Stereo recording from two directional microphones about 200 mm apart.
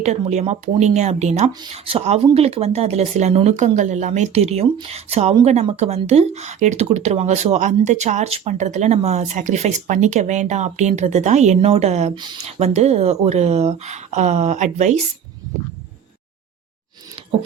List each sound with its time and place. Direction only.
0.0 s speech: 35° right (ahead or behind)
12.1 s speech: 20° right (ahead or behind)